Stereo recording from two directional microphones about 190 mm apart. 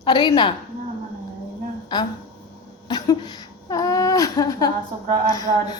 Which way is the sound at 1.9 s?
25° left (ahead or behind).